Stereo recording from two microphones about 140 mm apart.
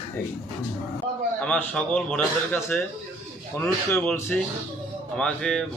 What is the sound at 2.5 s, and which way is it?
Speech, 15° left (ahead or behind).